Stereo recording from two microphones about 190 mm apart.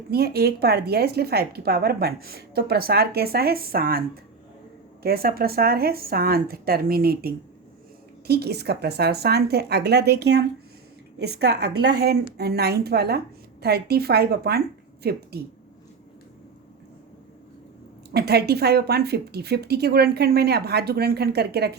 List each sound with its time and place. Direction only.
0.1 s a woman's voice: 55° right (ahead or behind)
18.1 s a woman's voice: 55° right (ahead or behind)